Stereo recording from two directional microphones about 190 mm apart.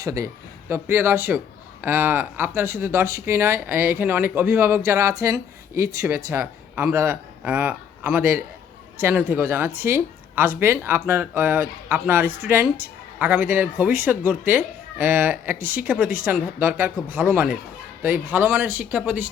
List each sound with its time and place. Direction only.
0.0 s speech: 20° right (ahead or behind)